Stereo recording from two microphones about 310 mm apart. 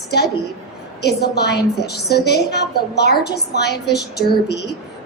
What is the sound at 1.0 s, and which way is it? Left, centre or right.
A woman's voice, left.